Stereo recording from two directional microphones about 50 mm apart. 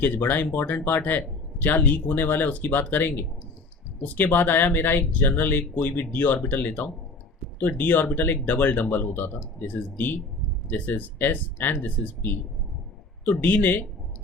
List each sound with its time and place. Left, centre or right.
0.0 s speech: left